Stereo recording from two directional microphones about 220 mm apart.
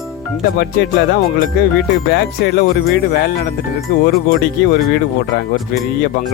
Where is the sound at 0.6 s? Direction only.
45° left (ahead or behind).